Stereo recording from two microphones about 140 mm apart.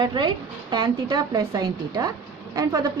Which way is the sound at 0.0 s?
30° right (ahead or behind).